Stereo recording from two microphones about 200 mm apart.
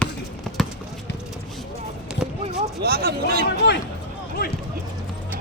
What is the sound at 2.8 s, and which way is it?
Speech, 50° right (ahead or behind).